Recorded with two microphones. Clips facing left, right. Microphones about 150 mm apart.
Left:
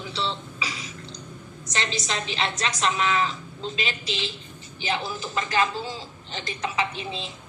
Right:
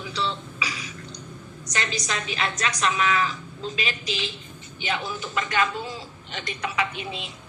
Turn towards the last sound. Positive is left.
turn(degrees=30)  # may be behind; listen again after turning